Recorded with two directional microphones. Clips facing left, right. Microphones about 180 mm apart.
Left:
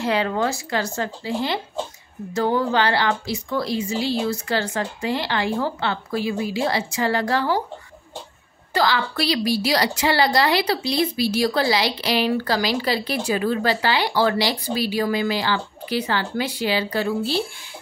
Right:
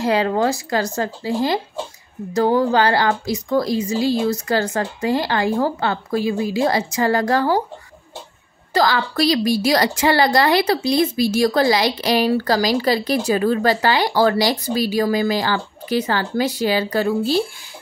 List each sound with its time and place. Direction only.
0.0 s a woman's voice: 35° right (ahead or behind)
8.7 s a woman's voice: 40° right (ahead or behind)